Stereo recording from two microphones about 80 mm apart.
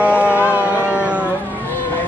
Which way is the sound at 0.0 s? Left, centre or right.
Centre.